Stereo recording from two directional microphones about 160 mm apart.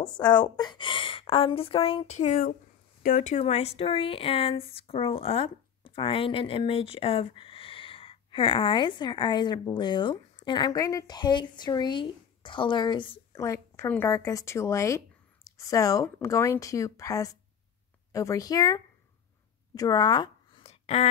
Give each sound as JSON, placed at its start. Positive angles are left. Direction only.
{"t": 0.3, "sound": "speech", "side_deg": 30}
{"t": 13.3, "sound": "speech", "side_deg": 20}
{"t": 19.7, "sound": "a sound", "side_deg": 25}